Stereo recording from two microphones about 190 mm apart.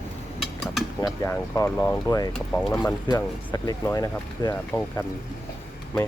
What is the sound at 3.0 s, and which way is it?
Speech, 20° left (ahead or behind).